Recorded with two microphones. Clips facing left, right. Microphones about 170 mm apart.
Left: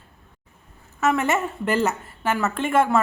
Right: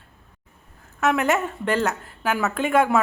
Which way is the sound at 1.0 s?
Centre (ahead or behind).